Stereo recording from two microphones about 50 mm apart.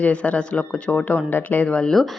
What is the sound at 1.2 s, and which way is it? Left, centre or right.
Speech, left.